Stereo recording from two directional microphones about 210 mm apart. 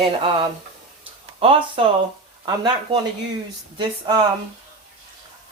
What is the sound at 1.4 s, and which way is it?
Speech, 25° right (ahead or behind).